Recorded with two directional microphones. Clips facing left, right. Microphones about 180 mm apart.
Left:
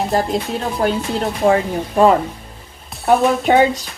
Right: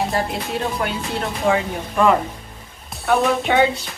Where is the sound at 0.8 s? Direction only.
35° left (ahead or behind).